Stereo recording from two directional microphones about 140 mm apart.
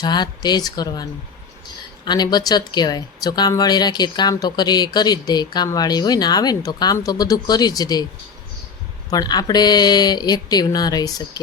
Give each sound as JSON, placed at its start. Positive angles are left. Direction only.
{"t": 0.0, "sound": "speech", "side_deg": 30}
{"t": 2.0, "sound": "speech", "side_deg": 30}
{"t": 9.0, "sound": "speech", "side_deg": 30}